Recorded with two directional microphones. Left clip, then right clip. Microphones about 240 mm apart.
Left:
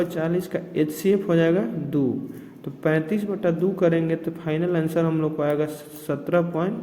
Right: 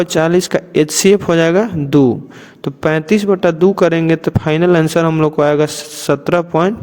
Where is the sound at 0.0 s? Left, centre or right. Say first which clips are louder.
Right 12 dB; right.